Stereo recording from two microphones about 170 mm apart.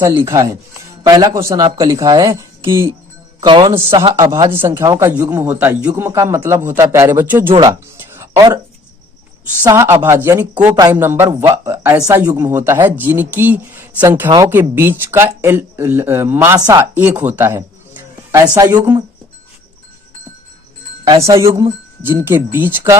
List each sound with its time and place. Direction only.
0.3 s speech: 20° right (ahead or behind)
8.1 s a sound: 15° right (ahead or behind)
9.6 s speech: 15° right (ahead or behind)
14.3 s speech: 25° right (ahead or behind)
14.5 s speech: 10° right (ahead or behind)
21.1 s speech: 20° right (ahead or behind)